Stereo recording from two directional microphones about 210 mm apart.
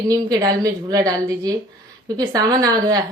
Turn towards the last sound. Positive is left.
turn(degrees=-15)  # may be behind; listen again after turning